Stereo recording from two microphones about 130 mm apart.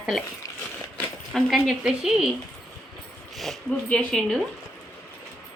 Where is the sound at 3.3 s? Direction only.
Centre (ahead or behind).